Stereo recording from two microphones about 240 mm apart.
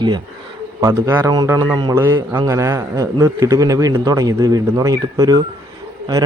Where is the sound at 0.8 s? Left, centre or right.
Centre.